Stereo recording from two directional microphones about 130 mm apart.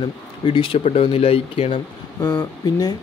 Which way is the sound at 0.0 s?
40° left (ahead or behind).